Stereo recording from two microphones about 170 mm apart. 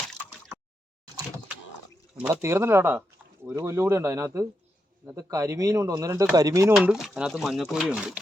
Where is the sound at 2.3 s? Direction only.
15° right (ahead or behind).